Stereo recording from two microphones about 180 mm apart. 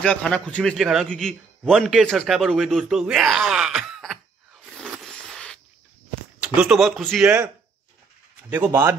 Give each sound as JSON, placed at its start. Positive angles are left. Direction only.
{"t": 0.0, "sound": "a man's voice", "side_deg": 5}
{"t": 4.6, "sound": "a sound", "side_deg": 0}
{"t": 6.4, "sound": "a man's voice", "side_deg": -5}
{"t": 7.2, "sound": "a man's voice", "side_deg": -10}